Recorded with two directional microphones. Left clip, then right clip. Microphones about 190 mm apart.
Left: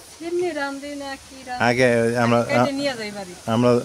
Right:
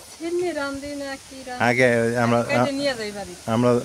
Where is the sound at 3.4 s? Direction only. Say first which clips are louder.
Left 2 dB; 5° left (ahead or behind).